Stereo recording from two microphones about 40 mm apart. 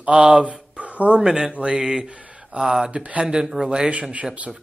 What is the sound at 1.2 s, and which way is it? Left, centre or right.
Speech, centre.